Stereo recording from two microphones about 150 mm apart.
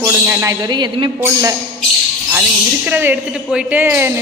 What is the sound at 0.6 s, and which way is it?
Speech, 30° right (ahead or behind).